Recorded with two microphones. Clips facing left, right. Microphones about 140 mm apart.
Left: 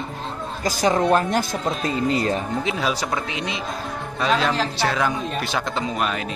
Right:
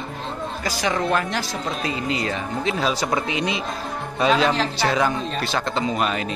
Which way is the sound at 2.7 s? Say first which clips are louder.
Right 5 dB; 5° left (ahead or behind).